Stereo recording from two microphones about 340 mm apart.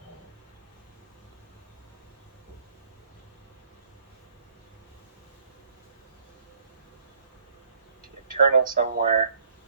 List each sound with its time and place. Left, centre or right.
8.3 s speech: right